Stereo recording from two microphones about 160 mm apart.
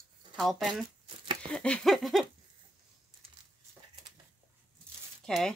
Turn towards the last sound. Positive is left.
turn(degrees=5)  # may be behind; listen again after turning